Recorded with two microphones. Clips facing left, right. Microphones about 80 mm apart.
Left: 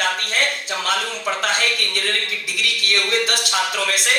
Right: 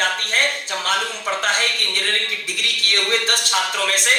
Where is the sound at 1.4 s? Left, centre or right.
Right.